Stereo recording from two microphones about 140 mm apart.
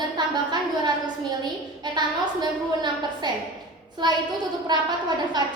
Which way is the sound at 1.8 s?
30° right (ahead or behind).